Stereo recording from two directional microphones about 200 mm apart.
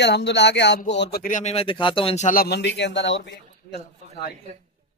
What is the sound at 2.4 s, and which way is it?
A man's voice, 55° left (ahead or behind).